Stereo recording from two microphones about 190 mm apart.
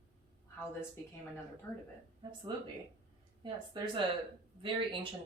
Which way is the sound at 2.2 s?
25° right (ahead or behind).